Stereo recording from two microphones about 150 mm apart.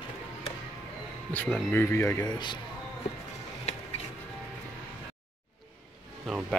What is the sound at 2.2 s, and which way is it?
Speech, 30° left (ahead or behind).